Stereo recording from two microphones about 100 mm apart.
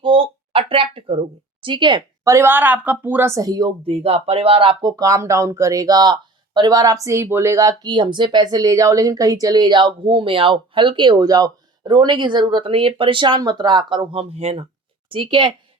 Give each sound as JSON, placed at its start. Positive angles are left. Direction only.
{"t": 0.0, "sound": "a sound", "side_deg": -60}
{"t": 2.2, "sound": "a woman's voice", "side_deg": -25}
{"t": 3.8, "sound": "speech", "side_deg": -80}
{"t": 4.8, "sound": "speech", "side_deg": -40}
{"t": 15.1, "sound": "a woman's voice", "side_deg": -55}